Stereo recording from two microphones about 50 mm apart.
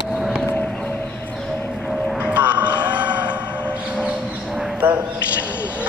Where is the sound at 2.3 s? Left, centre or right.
Right.